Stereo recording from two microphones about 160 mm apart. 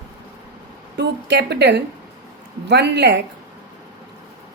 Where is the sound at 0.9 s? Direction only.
90° right.